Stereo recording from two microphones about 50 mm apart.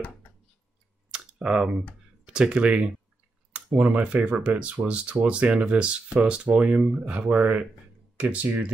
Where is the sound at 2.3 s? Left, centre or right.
Centre.